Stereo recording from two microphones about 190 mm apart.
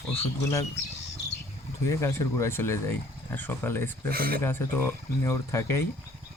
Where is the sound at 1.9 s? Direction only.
15° left (ahead or behind).